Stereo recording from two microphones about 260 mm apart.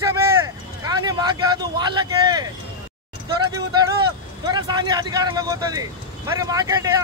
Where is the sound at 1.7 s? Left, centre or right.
Centre.